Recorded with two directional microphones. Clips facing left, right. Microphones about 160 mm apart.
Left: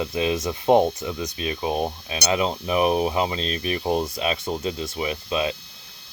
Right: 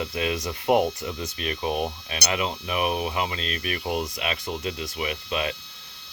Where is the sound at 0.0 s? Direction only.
25° left (ahead or behind).